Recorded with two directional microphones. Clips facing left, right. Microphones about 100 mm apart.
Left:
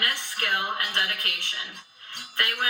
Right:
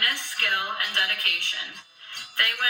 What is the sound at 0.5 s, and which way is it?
Speech, 20° left (ahead or behind).